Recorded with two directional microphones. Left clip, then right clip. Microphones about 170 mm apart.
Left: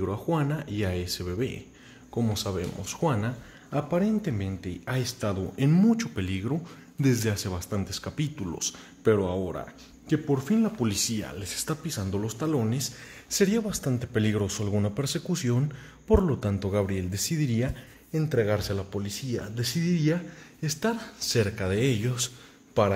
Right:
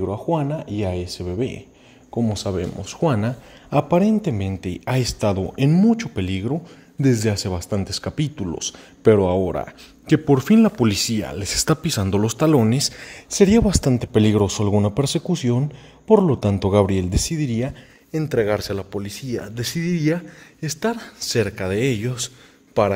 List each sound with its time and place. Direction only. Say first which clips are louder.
0.1 s speech: right 6 dB; 15° right (ahead or behind)
2.4 s a man's voice: right 7 dB; 30° right (ahead or behind)
5.7 s a man's voice: right 5 dB; 25° right (ahead or behind)
9.0 s a man's voice: right 9 dB; 35° right (ahead or behind)
11.8 s speech: right 11 dB; 65° right (ahead or behind)
13.3 s a man's voice: right 10 dB; 40° right (ahead or behind)
15.3 s a man's voice: right 7 dB; 20° right (ahead or behind)
18.1 s speech: right 6 dB; 70° right (ahead or behind); by 22.3 s 40° right (ahead or behind)
22.8 s speech: right 6 dB; 50° right (ahead or behind)